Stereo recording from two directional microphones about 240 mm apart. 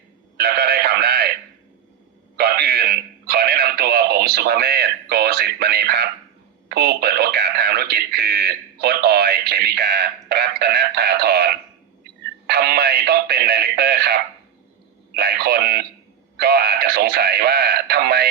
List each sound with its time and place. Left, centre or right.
0.3 s a sound: right
2.3 s music: right
6.7 s speech: right
12.5 s music: right
15.1 s radio: right